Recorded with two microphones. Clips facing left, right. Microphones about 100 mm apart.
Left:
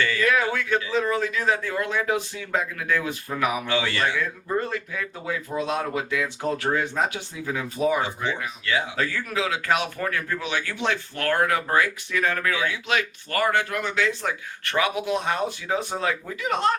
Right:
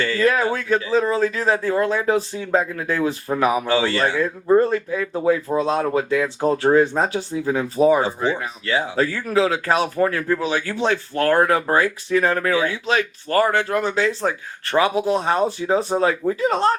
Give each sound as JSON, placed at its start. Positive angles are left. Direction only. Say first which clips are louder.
{"t": 0.0, "sound": "speech", "louder": "right 4 dB", "side_deg": -35}